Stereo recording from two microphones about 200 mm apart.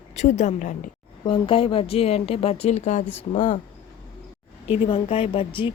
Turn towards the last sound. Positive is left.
turn(degrees=25)  # may be behind; listen again after turning